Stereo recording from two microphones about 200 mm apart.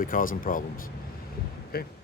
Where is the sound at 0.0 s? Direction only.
45° left (ahead or behind).